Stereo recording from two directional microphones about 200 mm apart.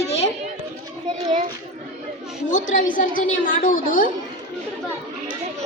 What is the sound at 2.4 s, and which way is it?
A woman's voice, 40° left (ahead or behind).